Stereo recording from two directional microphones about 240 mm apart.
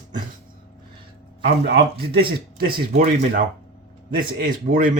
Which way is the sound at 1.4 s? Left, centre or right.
Right.